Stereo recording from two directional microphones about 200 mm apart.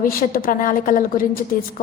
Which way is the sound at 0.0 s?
45° left (ahead or behind).